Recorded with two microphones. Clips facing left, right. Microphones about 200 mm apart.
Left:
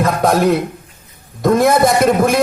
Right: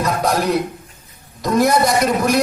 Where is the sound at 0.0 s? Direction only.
50° left (ahead or behind).